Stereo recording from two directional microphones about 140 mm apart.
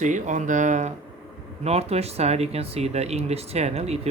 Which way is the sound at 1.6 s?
50° right (ahead or behind).